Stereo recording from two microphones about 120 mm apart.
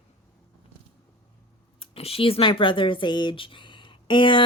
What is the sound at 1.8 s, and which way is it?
Speech, 50° left (ahead or behind).